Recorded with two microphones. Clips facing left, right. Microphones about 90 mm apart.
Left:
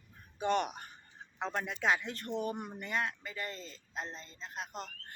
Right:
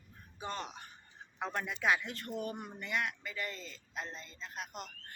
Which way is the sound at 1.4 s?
25° left (ahead or behind).